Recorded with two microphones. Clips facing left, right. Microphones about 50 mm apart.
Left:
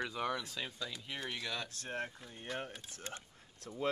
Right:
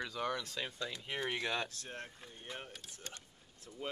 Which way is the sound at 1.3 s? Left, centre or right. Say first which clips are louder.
Right 4 dB; right.